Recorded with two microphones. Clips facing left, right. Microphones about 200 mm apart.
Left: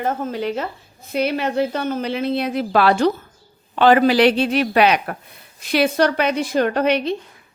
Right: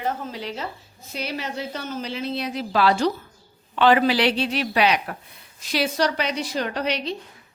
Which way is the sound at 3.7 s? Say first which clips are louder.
Left 4 dB; 45° left (ahead or behind).